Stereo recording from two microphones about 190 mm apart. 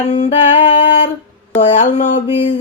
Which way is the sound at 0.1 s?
35° left (ahead or behind).